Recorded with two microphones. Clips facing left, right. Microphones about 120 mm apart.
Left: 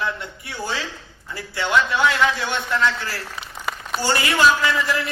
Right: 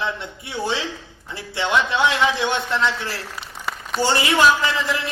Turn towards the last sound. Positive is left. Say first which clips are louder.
# left 1 dB
turn(degrees=-25)  # may be behind; listen again after turning